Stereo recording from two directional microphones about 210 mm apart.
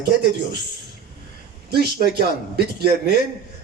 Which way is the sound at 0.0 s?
50° right (ahead or behind).